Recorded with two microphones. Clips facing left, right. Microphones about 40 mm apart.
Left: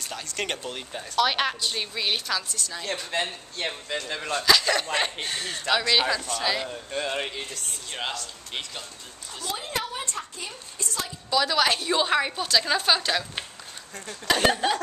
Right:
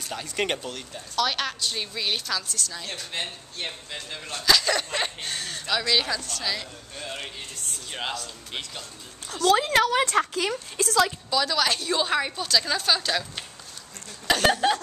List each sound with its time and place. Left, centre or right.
0.0 s speech: centre
1.1 s a woman's voice: centre
3.6 s speech: left
4.5 s a woman's voice: centre
6.9 s speech: left
7.9 s speech: centre
9.3 s a woman's voice: right
11.2 s a woman's voice: centre
14.2 s speech: centre